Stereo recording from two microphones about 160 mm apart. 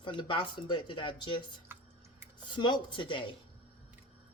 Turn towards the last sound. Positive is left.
turn(degrees=30)  # may be behind; listen again after turning